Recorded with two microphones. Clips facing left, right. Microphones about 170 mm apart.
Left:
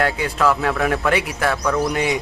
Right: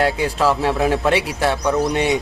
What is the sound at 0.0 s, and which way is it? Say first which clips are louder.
Speech: right 1 dB; 30° right (ahead or behind).